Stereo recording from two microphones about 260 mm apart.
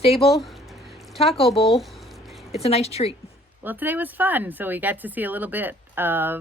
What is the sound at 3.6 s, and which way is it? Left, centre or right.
Speech, centre.